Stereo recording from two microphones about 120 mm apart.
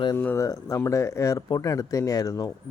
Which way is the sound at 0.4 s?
25° left (ahead or behind).